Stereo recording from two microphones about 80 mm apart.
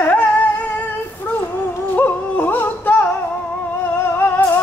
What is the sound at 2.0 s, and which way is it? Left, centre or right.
Yodeling, left.